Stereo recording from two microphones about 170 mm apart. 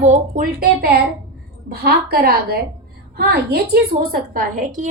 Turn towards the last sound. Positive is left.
turn(degrees=-50)  # may be behind; listen again after turning